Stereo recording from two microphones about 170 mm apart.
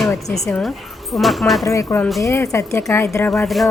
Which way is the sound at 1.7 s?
15° left (ahead or behind).